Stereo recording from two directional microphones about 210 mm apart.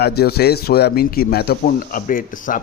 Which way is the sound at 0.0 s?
50° left (ahead or behind).